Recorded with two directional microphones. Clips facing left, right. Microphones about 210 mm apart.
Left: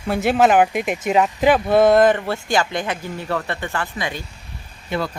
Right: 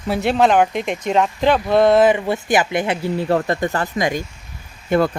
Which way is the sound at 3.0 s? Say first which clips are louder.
Right 7 dB; 40° right (ahead or behind).